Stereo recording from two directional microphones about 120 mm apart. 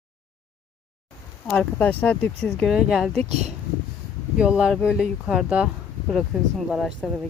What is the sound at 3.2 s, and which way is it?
Speech, 65° right (ahead or behind).